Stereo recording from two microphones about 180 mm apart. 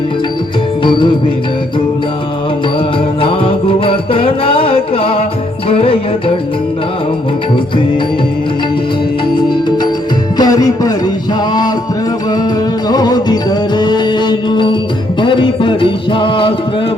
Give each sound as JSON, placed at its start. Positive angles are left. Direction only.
{"t": 0.9, "sound": "music", "side_deg": 25}
{"t": 3.2, "sound": "music", "side_deg": 30}
{"t": 9.3, "sound": "music", "side_deg": 25}
{"t": 12.9, "sound": "music", "side_deg": 20}